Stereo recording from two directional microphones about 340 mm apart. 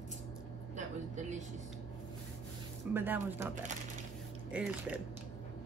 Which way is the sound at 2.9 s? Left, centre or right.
Centre.